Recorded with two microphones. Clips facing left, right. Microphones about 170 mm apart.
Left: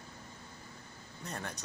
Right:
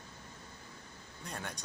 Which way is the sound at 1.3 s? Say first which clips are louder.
Left 1 dB; centre (ahead or behind).